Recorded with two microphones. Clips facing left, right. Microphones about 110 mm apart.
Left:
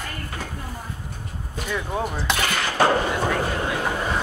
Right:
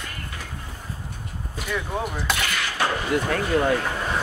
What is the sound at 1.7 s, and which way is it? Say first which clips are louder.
Speech: left 1 dB; 5° left (ahead or behind).